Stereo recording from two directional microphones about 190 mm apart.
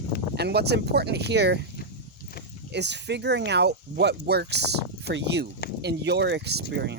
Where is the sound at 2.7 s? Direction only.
65° right (ahead or behind).